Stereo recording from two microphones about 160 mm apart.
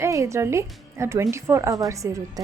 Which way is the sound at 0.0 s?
20° right (ahead or behind).